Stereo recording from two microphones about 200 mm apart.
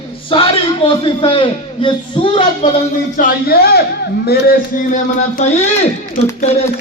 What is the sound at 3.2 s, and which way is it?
A man's voice, 50° left (ahead or behind).